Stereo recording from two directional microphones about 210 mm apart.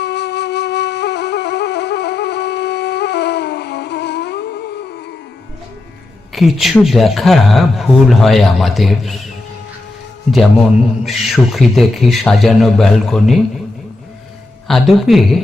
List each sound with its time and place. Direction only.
0.0 s flute: 55° left (ahead or behind)
6.3 s speech: centre (ahead or behind)
11.0 s speech: centre (ahead or behind)
14.7 s speech: centre (ahead or behind)